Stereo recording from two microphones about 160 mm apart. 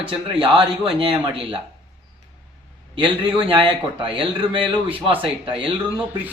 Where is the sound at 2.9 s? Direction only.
35° right (ahead or behind).